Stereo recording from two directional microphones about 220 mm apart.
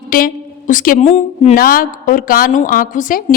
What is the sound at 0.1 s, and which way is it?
A woman's voice, 40° left (ahead or behind).